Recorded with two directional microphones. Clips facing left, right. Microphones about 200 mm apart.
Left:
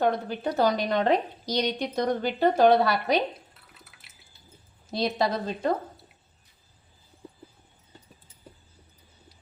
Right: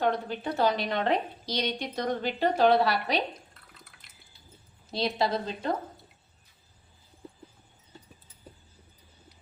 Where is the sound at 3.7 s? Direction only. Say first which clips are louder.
Even; 5° left (ahead or behind).